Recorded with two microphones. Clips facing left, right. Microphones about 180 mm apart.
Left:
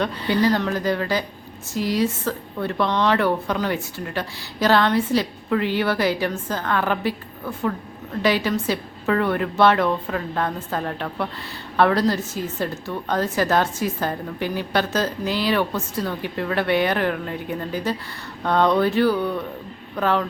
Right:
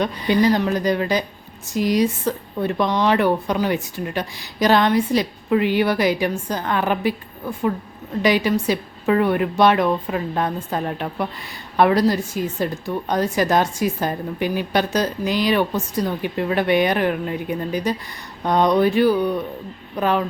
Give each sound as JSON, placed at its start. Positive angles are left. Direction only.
{"t": 0.0, "sound": "a woman's voice", "side_deg": -15}